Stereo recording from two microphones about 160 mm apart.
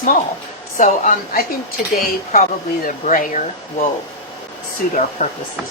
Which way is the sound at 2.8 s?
55° left (ahead or behind).